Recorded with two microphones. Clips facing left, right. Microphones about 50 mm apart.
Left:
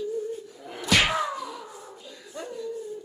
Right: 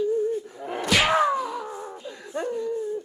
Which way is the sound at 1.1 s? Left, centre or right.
Right.